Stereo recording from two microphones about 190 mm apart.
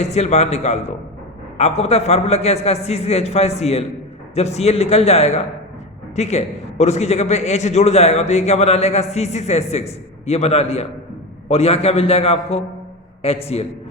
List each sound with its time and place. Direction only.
0.0 s a man's voice: 35° left (ahead or behind)